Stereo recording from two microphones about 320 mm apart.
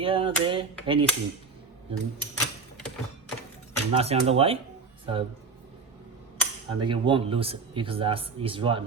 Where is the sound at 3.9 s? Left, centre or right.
Centre.